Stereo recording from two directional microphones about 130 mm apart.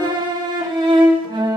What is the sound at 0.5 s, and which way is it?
Violin, 35° right (ahead or behind).